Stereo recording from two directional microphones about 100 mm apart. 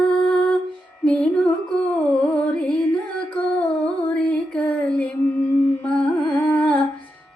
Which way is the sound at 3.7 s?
10° left (ahead or behind).